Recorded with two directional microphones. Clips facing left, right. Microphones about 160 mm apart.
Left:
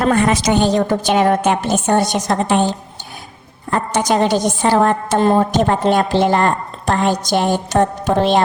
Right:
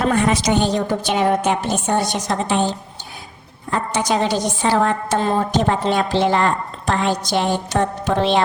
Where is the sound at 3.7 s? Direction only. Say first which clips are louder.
Left 3 dB; 55° left (ahead or behind).